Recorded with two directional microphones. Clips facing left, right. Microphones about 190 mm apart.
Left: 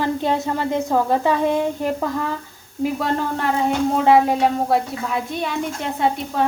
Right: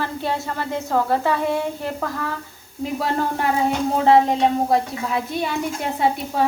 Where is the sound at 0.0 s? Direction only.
20° left (ahead or behind).